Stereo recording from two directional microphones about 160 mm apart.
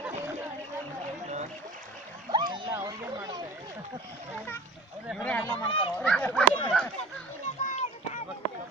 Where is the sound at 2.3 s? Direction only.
30° right (ahead or behind).